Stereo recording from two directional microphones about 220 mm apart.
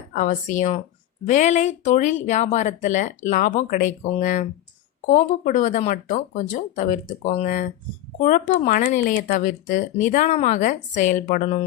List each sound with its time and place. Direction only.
0.1 s speech: 35° left (ahead or behind)